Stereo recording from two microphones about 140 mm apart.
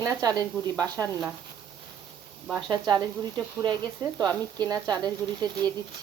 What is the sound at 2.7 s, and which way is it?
Speech, 25° right (ahead or behind).